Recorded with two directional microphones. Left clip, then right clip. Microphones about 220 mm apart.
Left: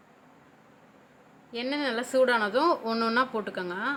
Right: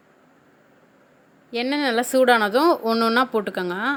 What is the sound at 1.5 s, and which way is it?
Speech, 35° right (ahead or behind).